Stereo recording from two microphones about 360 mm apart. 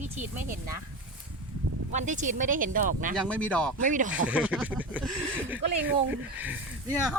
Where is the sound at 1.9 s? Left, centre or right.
Centre.